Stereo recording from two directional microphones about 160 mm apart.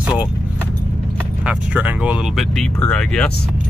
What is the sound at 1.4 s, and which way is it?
Speech, 10° right (ahead or behind).